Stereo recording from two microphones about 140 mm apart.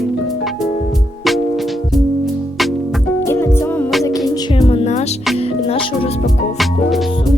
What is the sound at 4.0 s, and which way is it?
Music, 25° left (ahead or behind).